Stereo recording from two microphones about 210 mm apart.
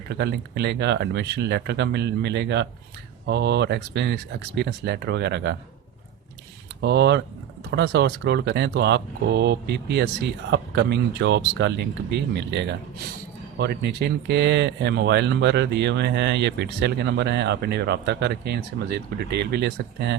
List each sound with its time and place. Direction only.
0.1 s speech: 55° right (ahead or behind)
6.8 s speech: 55° right (ahead or behind)